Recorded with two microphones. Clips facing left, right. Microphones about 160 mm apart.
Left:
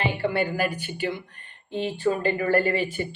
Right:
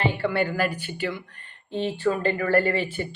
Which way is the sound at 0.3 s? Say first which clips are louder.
Right 1 dB; 15° left (ahead or behind).